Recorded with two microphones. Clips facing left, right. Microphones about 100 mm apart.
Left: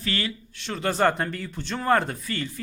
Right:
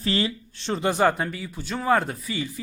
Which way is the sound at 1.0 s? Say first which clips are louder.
Left 2 dB; 5° right (ahead or behind).